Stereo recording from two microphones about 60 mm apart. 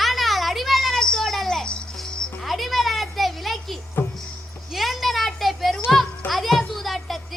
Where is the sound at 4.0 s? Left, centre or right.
Left.